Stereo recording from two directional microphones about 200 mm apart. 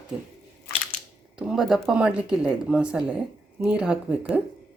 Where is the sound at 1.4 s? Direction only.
Centre (ahead or behind).